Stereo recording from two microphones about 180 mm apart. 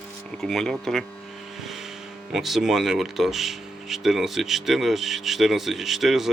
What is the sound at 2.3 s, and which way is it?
Speech, centre (ahead or behind).